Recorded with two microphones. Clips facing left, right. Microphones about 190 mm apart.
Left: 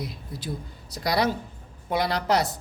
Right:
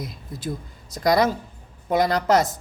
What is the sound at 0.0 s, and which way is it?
A woman's voice, 45° right (ahead or behind).